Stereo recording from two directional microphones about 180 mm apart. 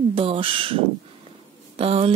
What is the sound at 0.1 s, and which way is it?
Speech, 30° right (ahead or behind).